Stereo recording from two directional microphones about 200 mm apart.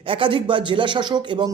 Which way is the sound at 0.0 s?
25° right (ahead or behind).